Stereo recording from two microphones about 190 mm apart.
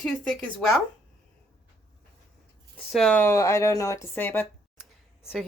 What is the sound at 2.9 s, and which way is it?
Speech, 5° left (ahead or behind).